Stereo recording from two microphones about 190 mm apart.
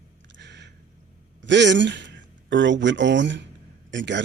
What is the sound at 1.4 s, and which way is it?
Speech, 70° right (ahead or behind).